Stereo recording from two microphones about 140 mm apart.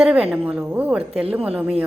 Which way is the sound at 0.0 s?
10° right (ahead or behind).